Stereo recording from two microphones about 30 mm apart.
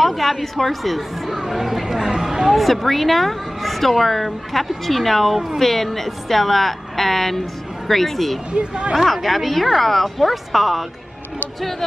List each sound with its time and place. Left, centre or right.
0.0 s a woman's voice: centre
2.5 s a woman's voice: centre
8.5 s speech: right
8.9 s speech: centre